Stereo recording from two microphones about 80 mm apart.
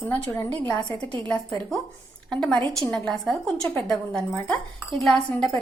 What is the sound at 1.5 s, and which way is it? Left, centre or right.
A woman's voice, centre.